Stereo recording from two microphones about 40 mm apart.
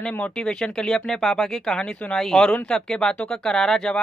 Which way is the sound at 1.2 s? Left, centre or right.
Centre.